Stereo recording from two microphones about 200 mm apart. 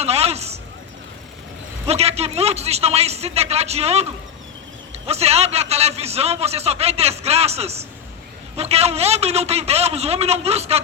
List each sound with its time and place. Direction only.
0.0 s a sound: 30° right (ahead or behind)
1.9 s a man's voice: 30° right (ahead or behind)
5.0 s a man's voice: 30° right (ahead or behind)